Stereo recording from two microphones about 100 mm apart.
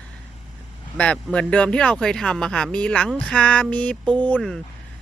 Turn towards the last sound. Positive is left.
turn(degrees=15)  # may be behind; listen again after turning